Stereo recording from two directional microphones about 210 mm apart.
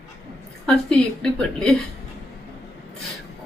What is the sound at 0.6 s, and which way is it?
Speech, 5° left (ahead or behind).